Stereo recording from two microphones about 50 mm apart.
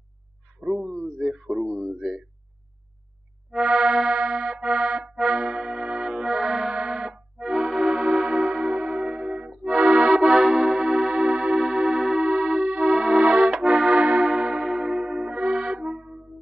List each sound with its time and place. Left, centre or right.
0.6 s a sound: centre
3.8 s music: centre
12.9 s music: centre
13.5 s accordion: centre
13.9 s music: right